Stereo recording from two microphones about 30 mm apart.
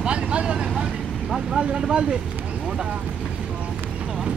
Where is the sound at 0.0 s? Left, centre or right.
Right.